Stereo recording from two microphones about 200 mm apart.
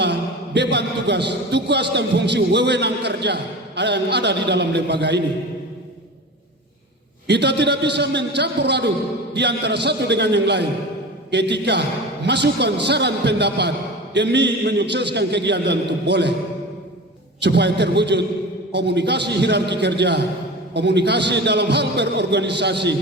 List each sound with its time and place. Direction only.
0.0 s a man's voice: 60° right (ahead or behind)
7.3 s a man's voice: 60° right (ahead or behind)
17.4 s a man's voice: 60° right (ahead or behind)